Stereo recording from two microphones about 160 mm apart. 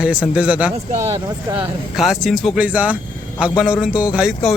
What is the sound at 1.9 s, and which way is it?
A man's voice, centre (ahead or behind).